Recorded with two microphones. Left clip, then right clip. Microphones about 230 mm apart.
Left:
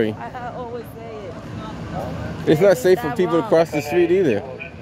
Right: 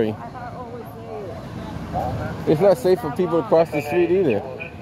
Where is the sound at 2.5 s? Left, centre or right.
Centre.